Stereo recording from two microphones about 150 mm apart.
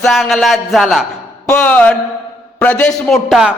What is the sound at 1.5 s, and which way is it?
A man's voice, 10° left (ahead or behind).